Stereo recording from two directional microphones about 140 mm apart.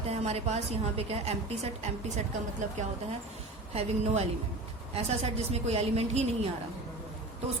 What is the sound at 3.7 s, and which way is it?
A woman's voice, 50° right (ahead or behind).